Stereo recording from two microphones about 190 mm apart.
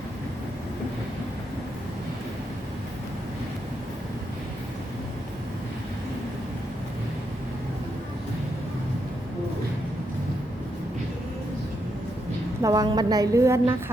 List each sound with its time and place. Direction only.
12.6 s a woman's voice: 20° right (ahead or behind)